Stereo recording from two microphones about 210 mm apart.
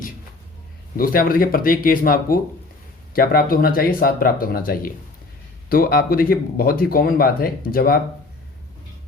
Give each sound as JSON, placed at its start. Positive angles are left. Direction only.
{"t": 0.9, "sound": "speech", "side_deg": 45}